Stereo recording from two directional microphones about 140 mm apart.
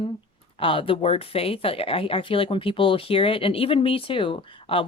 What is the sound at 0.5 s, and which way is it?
Speech, 40° left (ahead or behind).